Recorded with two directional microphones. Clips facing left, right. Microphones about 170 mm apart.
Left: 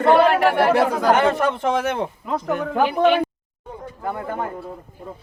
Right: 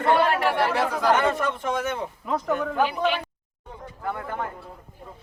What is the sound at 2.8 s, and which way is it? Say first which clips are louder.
Speech: left 11 dB; 60° left (ahead or behind).